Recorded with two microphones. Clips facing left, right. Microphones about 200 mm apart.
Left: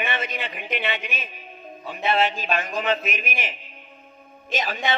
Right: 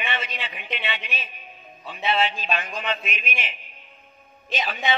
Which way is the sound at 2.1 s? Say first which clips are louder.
Left 2 dB; 50° left (ahead or behind).